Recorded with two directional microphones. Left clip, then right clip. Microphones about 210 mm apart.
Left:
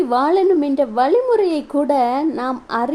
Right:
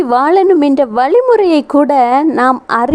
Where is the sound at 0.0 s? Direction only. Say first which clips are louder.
Right 6 dB; 30° right (ahead or behind).